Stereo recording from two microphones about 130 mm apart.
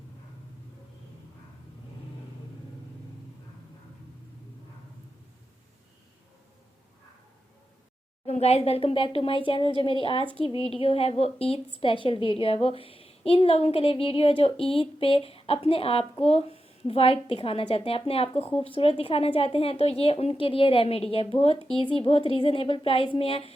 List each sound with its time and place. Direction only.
8.3 s a woman's voice: 55° left (ahead or behind)